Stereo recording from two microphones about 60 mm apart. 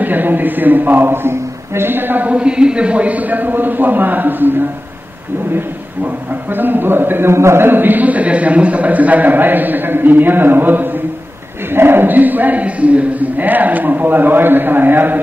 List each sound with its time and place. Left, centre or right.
0.0 s a man's voice: right
2.2 s speech: centre; by 4.6 s right
6.5 s a man's voice: right